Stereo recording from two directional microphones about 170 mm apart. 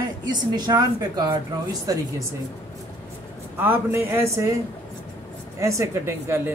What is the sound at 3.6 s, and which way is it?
Speech, 10° right (ahead or behind).